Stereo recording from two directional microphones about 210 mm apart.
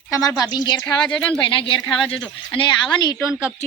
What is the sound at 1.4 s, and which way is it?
Speech, 25° left (ahead or behind).